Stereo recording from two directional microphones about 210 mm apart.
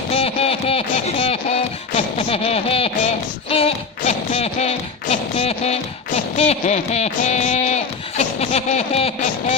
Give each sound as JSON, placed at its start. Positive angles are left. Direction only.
{"t": 0.1, "sound": "speech", "side_deg": 30}